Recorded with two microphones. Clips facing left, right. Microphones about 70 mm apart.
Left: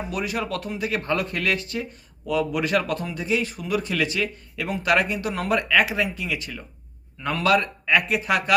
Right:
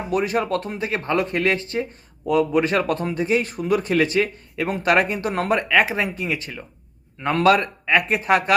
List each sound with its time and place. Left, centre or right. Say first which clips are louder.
0.1 s speech: right 9 dB; right